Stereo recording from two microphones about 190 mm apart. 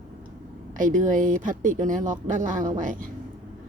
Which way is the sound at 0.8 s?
45° right (ahead or behind).